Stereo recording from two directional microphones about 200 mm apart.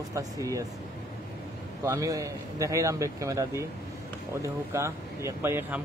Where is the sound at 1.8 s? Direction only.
15° right (ahead or behind).